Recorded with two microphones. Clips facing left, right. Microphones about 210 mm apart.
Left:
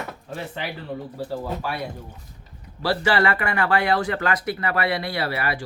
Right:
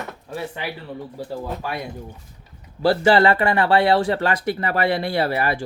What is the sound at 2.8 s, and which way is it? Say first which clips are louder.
Speech: right 6 dB; 25° right (ahead or behind).